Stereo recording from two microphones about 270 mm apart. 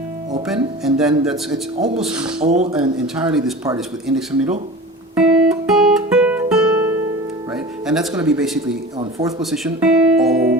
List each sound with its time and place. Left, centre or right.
0.4 s speech: centre
2.4 s speech: right
3.8 s speech: centre
5.1 s guitar: centre
7.5 s music: centre
8.1 s speech: centre
9.0 s speech: centre
9.4 s speech: centre
10.3 s music: right